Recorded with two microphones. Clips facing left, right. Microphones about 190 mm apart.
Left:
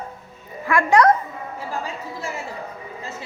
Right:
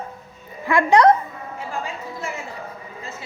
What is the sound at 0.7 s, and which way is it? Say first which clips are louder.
Speech: right 2 dB; 20° right (ahead or behind).